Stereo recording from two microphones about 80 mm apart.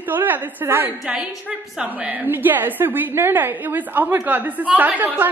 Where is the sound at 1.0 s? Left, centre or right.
Centre.